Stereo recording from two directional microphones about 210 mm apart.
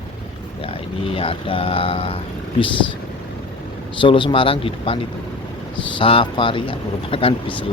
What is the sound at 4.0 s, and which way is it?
Speech, 25° left (ahead or behind).